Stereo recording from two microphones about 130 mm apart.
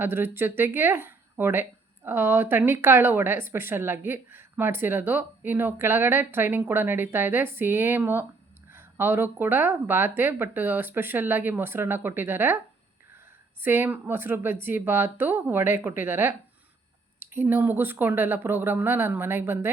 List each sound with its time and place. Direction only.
0.0 s speech: 15° right (ahead or behind)
13.6 s speech: 15° right (ahead or behind)